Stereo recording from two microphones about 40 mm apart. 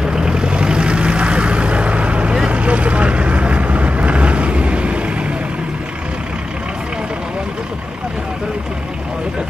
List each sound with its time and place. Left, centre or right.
0.0 s vehicle: right